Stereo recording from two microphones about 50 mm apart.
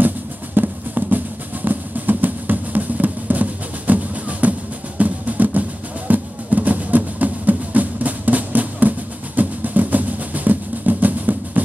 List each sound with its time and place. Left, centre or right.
0.6 s music: right